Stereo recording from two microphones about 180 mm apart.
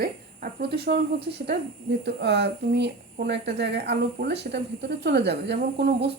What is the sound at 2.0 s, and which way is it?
Speech, 70° right (ahead or behind).